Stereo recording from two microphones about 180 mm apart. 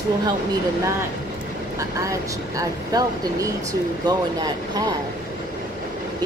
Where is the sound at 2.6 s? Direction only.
20° right (ahead or behind).